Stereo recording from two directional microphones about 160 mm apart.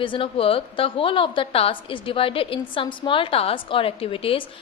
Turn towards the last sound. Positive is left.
turn(degrees=35)  # may be behind; listen again after turning